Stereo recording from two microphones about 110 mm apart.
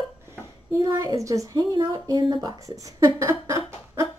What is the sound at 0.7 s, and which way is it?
Speech, 25° right (ahead or behind).